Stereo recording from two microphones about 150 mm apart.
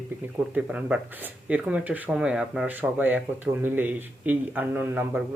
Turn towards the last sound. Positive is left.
turn(degrees=-10)  # may be behind; listen again after turning